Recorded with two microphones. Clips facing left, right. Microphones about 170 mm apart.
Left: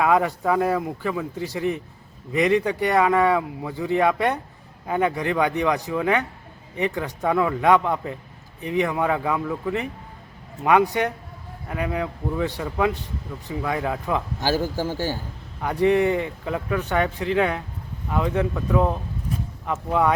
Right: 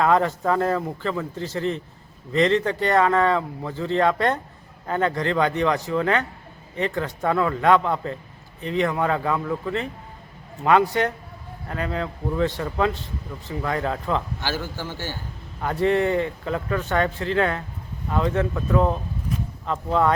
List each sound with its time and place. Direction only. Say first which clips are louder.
0.0 s speech: even; 10° left (ahead or behind)
14.4 s a man's voice: left 6 dB; 40° left (ahead or behind)
15.6 s speech: left 2 dB; 15° left (ahead or behind)